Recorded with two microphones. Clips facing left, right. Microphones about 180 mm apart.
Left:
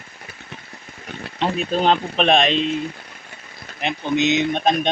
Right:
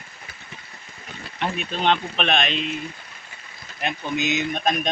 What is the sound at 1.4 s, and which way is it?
Speech, 35° left (ahead or behind).